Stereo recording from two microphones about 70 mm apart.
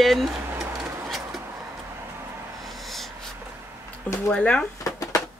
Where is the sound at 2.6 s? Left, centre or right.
Centre.